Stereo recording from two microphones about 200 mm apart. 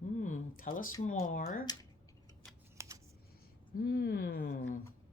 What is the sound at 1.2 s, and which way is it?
Speech, 40° left (ahead or behind).